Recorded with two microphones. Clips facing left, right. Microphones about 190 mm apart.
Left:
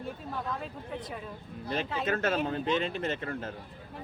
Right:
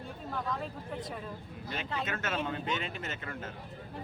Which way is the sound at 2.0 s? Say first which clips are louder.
Left 8 dB; 35° left (ahead or behind).